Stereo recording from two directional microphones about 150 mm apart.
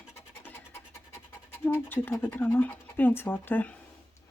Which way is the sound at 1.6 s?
15° left (ahead or behind).